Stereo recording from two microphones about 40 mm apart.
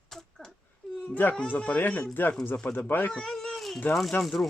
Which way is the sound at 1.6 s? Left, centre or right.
Left.